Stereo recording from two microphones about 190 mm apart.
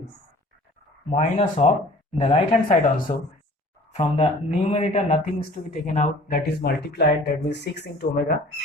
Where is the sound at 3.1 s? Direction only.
45° left (ahead or behind).